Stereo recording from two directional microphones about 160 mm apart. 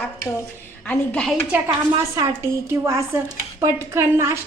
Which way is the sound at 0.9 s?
10° left (ahead or behind).